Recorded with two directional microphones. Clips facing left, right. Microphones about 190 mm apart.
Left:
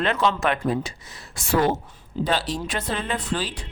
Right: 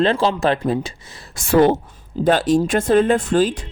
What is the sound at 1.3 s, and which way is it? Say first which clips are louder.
Speech: right 7 dB; 50° right (ahead or behind).